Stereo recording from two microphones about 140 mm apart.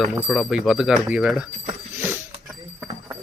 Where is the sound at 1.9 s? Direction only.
15° right (ahead or behind).